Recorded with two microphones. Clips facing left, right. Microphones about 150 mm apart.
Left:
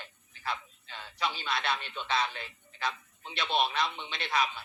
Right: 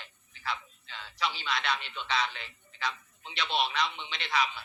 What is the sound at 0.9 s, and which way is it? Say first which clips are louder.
Speech: even; 15° left (ahead or behind).